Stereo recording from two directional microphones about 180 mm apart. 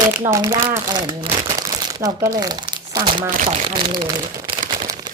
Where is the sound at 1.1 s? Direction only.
30° right (ahead or behind).